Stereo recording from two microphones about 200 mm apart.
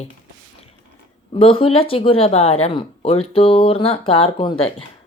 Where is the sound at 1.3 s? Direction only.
25° left (ahead or behind).